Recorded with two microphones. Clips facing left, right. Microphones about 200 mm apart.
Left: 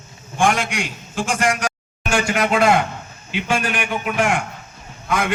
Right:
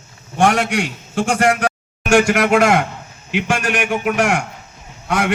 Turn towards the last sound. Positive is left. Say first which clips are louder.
# right 3 dB
turn(degrees=-75)  # may be behind; listen again after turning